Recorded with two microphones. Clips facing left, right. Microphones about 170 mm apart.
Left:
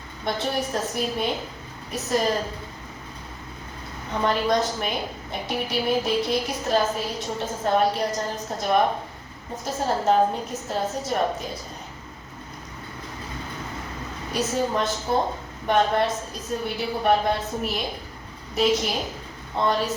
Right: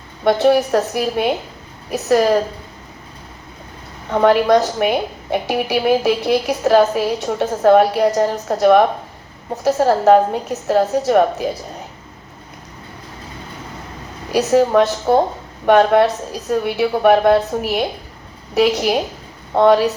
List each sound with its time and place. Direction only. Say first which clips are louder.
0.3 s a woman's voice: right 13 dB; 70° right (ahead or behind)
4.1 s a woman's voice: right 10 dB; 70° right (ahead or behind)
14.3 s a woman's voice: right 11 dB; 75° right (ahead or behind)